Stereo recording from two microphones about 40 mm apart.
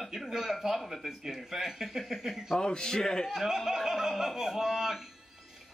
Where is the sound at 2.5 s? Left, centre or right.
Centre.